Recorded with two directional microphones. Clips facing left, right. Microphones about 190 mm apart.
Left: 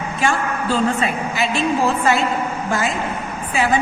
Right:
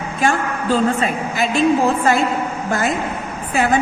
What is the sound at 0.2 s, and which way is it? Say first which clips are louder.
A woman's voice: right 2 dB; 40° right (ahead or behind).